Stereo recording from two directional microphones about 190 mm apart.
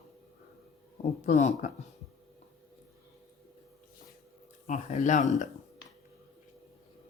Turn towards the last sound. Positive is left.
turn(degrees=40)  # may be behind; listen again after turning